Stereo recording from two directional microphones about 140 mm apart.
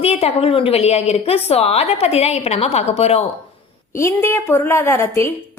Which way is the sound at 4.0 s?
20° left (ahead or behind).